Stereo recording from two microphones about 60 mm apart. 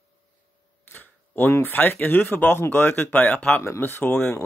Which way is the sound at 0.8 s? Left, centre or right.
Left.